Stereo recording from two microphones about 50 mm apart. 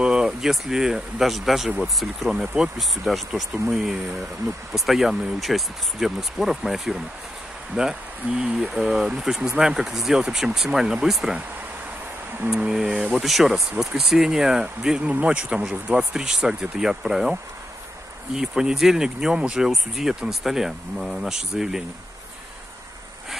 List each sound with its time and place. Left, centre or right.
0.0 s a sound: centre
0.4 s speech: centre
12.4 s speech: centre
13.2 s speech: centre; by 16.2 s right
16.2 s speech: centre